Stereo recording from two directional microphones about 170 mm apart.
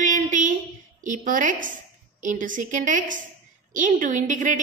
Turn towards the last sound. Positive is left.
turn(degrees=-50)  # may be behind; listen again after turning